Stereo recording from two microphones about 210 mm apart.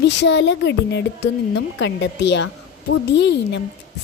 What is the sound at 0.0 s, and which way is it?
A woman's voice, 55° left (ahead or behind).